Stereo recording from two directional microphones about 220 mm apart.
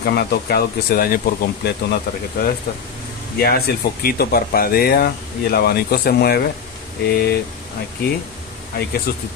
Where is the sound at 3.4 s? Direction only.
45° left (ahead or behind).